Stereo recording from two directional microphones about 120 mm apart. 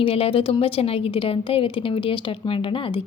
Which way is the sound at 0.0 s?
50° left (ahead or behind).